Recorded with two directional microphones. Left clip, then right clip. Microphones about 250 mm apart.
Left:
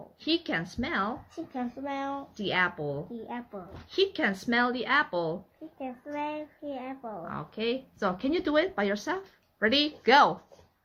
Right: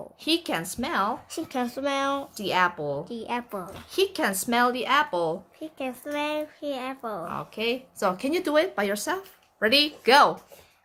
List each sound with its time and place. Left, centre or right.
0.3 s speech: centre
1.5 s speech: right
2.3 s speech: centre
3.2 s speech: right
3.9 s speech: centre
5.8 s speech: right
7.3 s speech: centre